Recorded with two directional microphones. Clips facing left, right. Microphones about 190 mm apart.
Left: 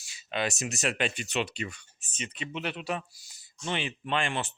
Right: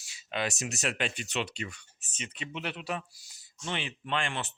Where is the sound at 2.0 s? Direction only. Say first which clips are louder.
Left 3 dB; 5° right (ahead or behind).